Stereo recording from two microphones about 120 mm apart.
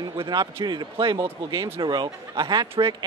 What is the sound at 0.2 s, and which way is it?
Speech, 35° right (ahead or behind).